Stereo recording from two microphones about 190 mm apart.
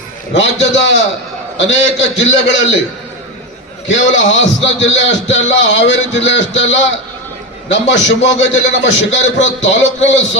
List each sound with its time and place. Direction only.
0.3 s a man's voice: 70° left (ahead or behind)
4.1 s a man's voice: 80° left